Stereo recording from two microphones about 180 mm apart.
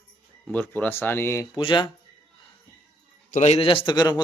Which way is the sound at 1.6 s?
25° left (ahead or behind).